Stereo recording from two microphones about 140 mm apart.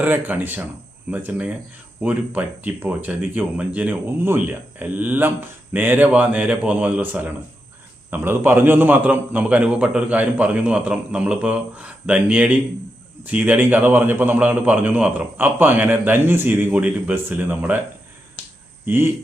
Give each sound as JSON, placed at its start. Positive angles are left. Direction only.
{"t": 0.0, "sound": "speech", "side_deg": -10}
{"t": 18.9, "sound": "speech", "side_deg": -15}